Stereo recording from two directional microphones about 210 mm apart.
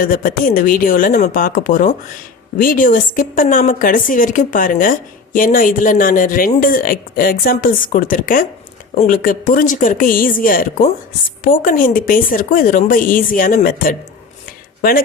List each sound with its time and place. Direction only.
0.0 s a woman's voice: 40° left (ahead or behind)